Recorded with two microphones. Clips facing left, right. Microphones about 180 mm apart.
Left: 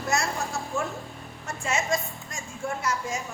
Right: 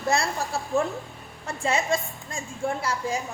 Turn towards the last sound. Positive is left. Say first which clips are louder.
# right 2 dB
turn(degrees=-30)  # may be behind; listen again after turning